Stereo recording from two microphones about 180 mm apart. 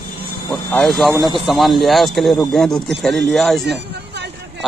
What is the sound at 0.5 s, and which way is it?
A man's voice, 5° left (ahead or behind).